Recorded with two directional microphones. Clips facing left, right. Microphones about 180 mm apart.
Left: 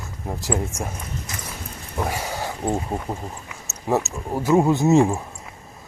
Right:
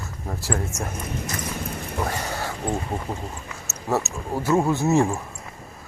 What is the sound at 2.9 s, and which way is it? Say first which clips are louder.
Speech: left 1 dB; 20° left (ahead or behind).